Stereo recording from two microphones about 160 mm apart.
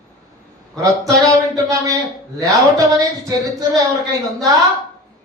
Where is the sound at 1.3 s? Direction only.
20° right (ahead or behind).